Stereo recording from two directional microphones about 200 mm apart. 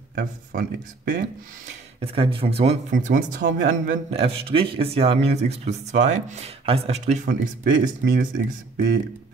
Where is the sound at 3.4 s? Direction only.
45° right (ahead or behind).